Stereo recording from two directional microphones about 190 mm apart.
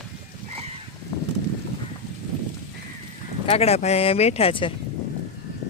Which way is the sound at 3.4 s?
30° left (ahead or behind).